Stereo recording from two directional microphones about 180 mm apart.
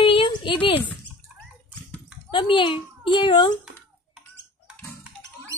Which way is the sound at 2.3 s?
30° left (ahead or behind).